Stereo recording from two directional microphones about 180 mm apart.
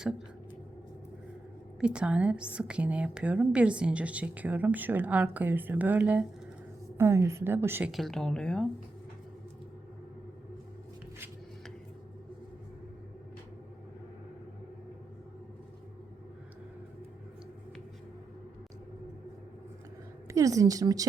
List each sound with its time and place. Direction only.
1.8 s a woman's voice: 5° right (ahead or behind)
7.9 s speech: centre (ahead or behind)
20.2 s speech: 20° right (ahead or behind)